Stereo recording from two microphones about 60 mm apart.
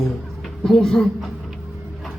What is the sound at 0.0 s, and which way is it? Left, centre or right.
Speech, centre.